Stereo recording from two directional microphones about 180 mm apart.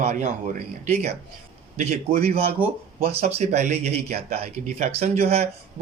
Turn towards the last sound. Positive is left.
turn(degrees=-35)  # may be behind; listen again after turning